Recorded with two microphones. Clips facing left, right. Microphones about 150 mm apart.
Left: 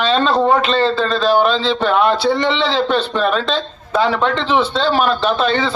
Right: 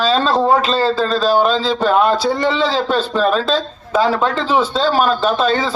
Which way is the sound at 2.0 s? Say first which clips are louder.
Even; 40° right (ahead or behind).